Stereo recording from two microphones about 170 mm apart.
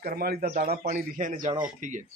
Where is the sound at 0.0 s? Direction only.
60° right (ahead or behind).